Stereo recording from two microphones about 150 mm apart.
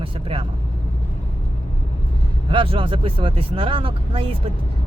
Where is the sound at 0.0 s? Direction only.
35° right (ahead or behind).